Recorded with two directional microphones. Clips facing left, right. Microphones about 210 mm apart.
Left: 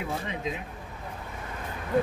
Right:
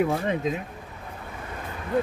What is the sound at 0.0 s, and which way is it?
Speech, 50° right (ahead or behind).